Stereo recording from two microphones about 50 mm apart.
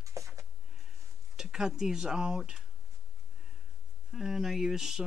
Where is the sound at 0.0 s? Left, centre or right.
Right.